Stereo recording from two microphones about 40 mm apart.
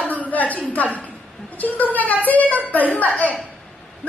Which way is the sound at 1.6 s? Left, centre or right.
Left.